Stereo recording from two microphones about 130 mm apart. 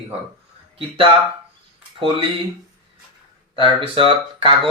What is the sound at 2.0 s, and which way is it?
Speech, 40° right (ahead or behind).